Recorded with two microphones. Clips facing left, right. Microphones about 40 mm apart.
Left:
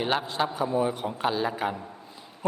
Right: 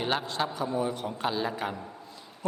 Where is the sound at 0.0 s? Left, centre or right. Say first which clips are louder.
Left 3 dB; centre.